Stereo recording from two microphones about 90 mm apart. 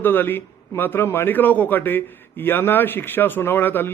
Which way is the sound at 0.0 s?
20° left (ahead or behind).